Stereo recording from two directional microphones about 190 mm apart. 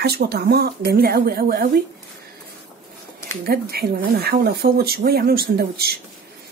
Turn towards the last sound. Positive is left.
turn(degrees=-55)  # may be behind; listen again after turning